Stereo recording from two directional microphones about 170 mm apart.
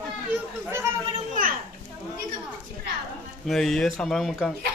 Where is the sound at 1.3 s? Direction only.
55° right (ahead or behind).